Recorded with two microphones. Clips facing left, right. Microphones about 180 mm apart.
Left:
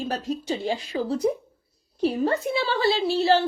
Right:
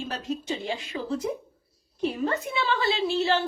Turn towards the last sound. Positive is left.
turn(degrees=35)  # may be behind; listen again after turning